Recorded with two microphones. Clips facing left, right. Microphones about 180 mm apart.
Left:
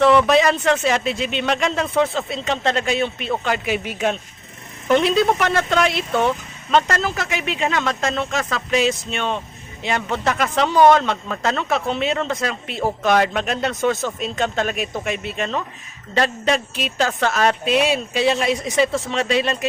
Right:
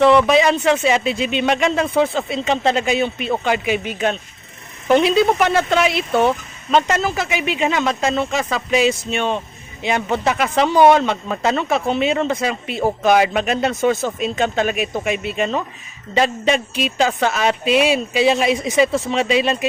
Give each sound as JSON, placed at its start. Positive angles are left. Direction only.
{"t": 0.0, "sound": "speech", "side_deg": 0}